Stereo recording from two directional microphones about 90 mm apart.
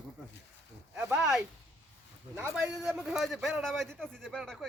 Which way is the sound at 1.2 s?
5° right (ahead or behind).